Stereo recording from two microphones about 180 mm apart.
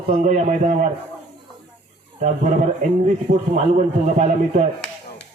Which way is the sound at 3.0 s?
40° right (ahead or behind).